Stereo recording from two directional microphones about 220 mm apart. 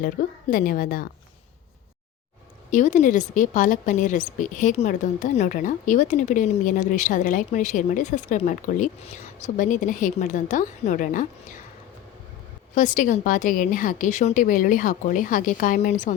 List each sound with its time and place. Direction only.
0.0 s a woman's voice: 40° left (ahead or behind)
2.6 s a woman's voice: 35° left (ahead or behind)
12.7 s a woman's voice: 35° left (ahead or behind)